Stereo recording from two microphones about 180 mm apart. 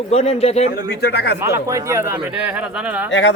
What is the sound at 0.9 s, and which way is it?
Speech, 65° left (ahead or behind).